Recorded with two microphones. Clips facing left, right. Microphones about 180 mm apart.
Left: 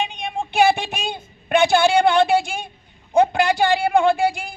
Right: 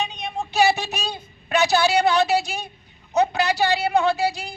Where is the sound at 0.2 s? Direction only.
50° left (ahead or behind).